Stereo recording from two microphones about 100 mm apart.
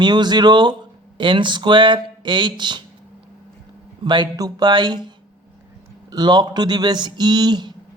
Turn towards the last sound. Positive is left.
turn(degrees=-45)  # may be behind; listen again after turning